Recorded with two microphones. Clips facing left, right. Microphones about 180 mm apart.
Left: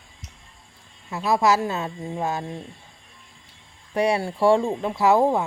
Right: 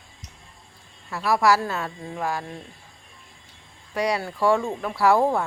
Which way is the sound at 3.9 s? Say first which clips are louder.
Left 3 dB; 25° left (ahead or behind).